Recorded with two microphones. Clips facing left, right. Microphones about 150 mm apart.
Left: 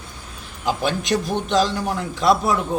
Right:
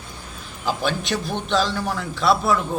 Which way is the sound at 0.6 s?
Centre (ahead or behind).